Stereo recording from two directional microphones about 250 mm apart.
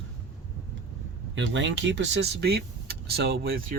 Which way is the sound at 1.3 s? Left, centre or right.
Right.